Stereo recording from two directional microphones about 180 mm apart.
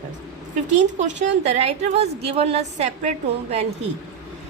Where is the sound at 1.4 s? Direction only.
35° right (ahead or behind).